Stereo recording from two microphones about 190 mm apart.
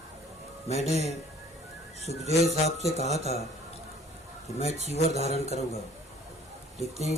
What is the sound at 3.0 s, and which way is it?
Speech, 35° left (ahead or behind).